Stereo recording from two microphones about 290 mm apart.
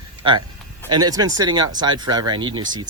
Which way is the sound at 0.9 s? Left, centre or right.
Centre.